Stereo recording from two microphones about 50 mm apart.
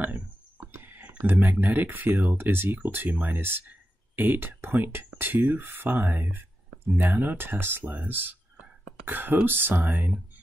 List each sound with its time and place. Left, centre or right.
0.6 s a sound: right
1.1 s speech: right
2.3 s speech: right
3.3 s speech: right
3.6 s speech: right
7.8 s speech: right
8.1 s speech: right